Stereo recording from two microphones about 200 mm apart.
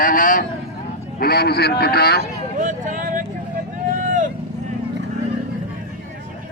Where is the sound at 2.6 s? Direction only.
40° right (ahead or behind).